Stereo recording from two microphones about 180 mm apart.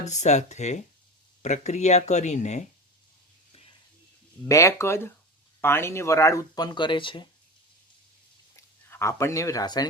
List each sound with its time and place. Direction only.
0.0 s speech: 40° left (ahead or behind)
4.4 s speech: 15° left (ahead or behind)
8.5 s speech: 15° left (ahead or behind)